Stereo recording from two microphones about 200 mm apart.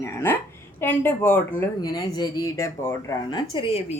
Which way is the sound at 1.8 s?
20° left (ahead or behind).